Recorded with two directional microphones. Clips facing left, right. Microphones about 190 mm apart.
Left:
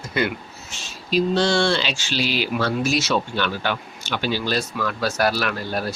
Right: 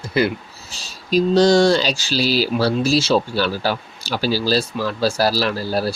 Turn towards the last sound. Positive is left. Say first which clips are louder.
# right 5 dB
turn(degrees=-35)  # may be behind; listen again after turning